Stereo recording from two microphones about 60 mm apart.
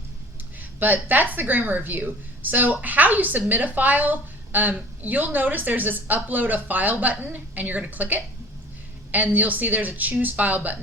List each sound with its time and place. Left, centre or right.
0.6 s a woman's voice: right